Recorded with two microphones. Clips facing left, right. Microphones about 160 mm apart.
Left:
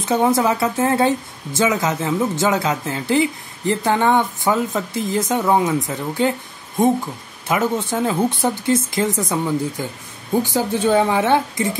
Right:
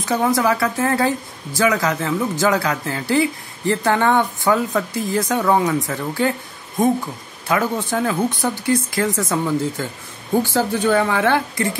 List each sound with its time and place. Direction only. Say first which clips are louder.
0.0 s a woman's voice: left 1 dB; 25° left (ahead or behind)
7.4 s a woman's voice: left 1 dB; 20° left (ahead or behind)